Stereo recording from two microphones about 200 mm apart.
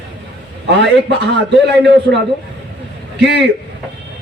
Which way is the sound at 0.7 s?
60° right (ahead or behind).